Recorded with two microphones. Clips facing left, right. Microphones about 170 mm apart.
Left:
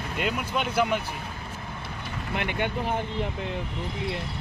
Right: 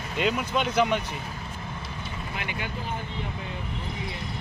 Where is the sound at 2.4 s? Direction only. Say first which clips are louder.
Left 7 dB; 60° left (ahead or behind).